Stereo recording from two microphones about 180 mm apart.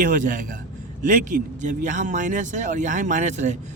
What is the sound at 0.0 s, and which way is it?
Speech, 45° right (ahead or behind).